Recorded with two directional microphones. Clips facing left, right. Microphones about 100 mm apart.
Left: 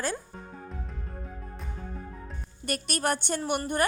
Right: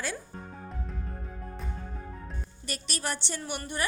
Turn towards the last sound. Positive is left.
turn(degrees=50)  # may be behind; listen again after turning